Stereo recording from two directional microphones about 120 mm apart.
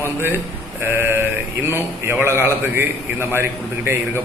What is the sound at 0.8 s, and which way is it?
Speech, 20° right (ahead or behind).